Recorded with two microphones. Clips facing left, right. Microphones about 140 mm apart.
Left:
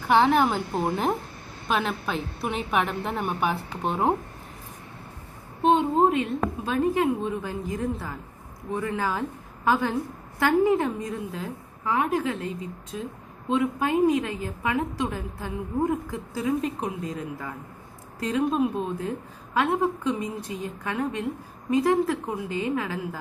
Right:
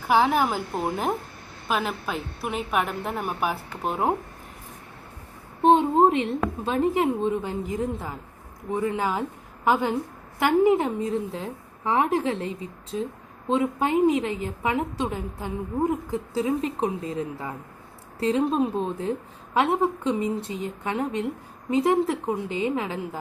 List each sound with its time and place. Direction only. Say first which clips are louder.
0.1 s a woman's voice: left 1 dB; 5° right (ahead or behind)
5.6 s a woman's voice: right 2 dB; 30° right (ahead or behind)
13.5 s a woman's voice: right 1 dB; 25° right (ahead or behind)